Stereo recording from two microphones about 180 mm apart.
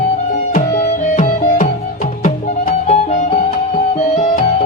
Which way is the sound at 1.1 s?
45° left (ahead or behind).